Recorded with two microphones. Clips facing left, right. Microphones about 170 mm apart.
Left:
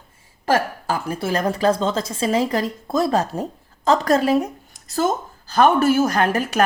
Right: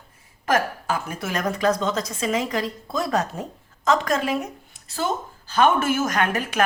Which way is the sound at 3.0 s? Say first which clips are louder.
Left 4 dB; 30° left (ahead or behind).